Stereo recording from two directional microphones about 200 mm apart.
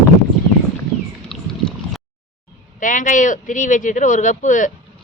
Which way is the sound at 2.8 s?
40° left (ahead or behind).